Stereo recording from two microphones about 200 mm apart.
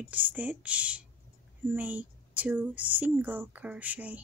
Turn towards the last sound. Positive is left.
turn(degrees=-10)  # may be behind; listen again after turning